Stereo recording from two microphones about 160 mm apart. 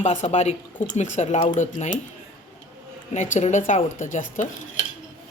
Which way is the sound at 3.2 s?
50° left (ahead or behind).